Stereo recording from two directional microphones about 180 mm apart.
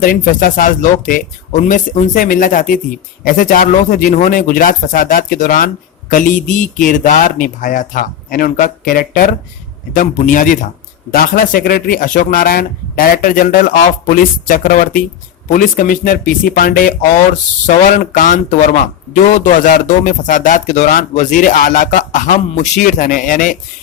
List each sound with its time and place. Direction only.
0.0 s speech: 50° left (ahead or behind)
17.9 s speech: 50° left (ahead or behind)